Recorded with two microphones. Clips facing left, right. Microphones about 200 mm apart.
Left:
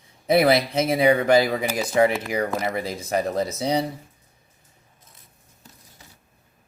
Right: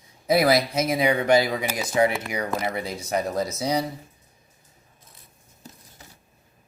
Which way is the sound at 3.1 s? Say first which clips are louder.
Left 2 dB; 30° left (ahead or behind).